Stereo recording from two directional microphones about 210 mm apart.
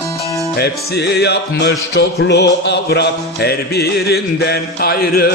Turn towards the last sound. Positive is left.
turn(degrees=50)  # may be behind; listen again after turning